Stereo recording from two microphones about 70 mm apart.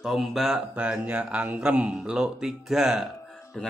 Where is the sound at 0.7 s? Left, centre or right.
Centre.